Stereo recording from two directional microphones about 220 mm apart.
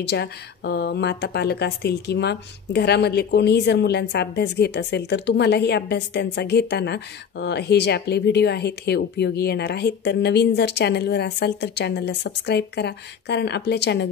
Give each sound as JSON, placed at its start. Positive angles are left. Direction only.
{"t": 0.0, "sound": "a woman's voice", "side_deg": 50}